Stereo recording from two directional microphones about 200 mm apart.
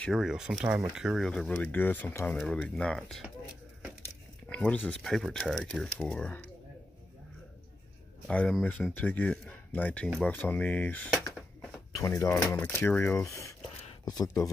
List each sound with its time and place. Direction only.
0.0 s speech: centre (ahead or behind)
4.5 s speech: 5° left (ahead or behind)
8.3 s speech: 5° left (ahead or behind)
13.7 s a sound: 30° left (ahead or behind)
14.1 s speech: 15° left (ahead or behind)